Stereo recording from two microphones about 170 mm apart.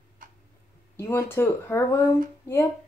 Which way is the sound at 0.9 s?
15° left (ahead or behind).